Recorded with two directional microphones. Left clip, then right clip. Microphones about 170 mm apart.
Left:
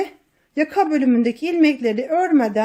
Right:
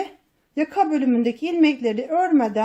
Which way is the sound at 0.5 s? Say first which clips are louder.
Left 2 dB; 30° left (ahead or behind).